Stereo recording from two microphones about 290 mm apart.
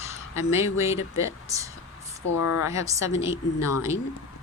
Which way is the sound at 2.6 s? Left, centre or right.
Centre.